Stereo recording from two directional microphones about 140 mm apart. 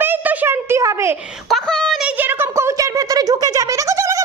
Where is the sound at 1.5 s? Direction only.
5° left (ahead or behind).